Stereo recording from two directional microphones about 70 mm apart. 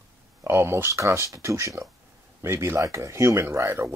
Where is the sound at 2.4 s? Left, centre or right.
Right.